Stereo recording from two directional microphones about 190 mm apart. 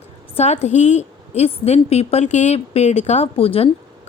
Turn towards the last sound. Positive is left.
turn(degrees=30)  # may be behind; listen again after turning